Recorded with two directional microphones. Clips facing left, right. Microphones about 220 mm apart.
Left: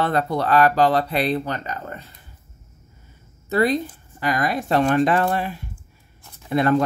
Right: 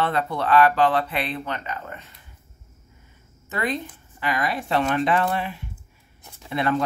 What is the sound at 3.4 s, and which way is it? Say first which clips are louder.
A woman's voice: left 8 dB; 35° left (ahead or behind).